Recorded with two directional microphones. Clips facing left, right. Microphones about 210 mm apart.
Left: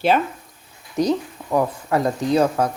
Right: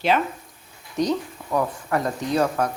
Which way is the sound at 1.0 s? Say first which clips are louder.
Left 3 dB; 25° left (ahead or behind).